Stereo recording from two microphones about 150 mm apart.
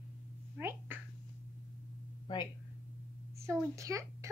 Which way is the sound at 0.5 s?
15° right (ahead or behind).